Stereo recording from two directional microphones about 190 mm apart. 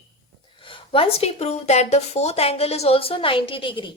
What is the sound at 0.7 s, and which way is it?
A woman's voice, 30° left (ahead or behind).